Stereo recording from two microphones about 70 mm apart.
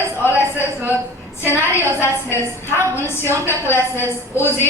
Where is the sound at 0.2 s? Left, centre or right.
Left.